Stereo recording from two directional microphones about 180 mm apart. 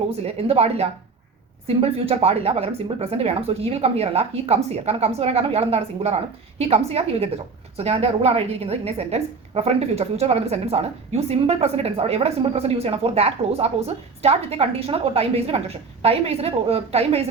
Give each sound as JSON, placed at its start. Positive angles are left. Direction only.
{"t": 0.2, "sound": "a woman's voice", "side_deg": -35}